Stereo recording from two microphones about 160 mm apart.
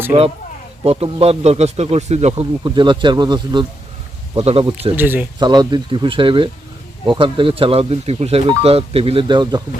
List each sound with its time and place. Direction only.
0.1 s speech: 45° right (ahead or behind)
4.9 s speech: 10° right (ahead or behind)
5.4 s speech: 25° right (ahead or behind)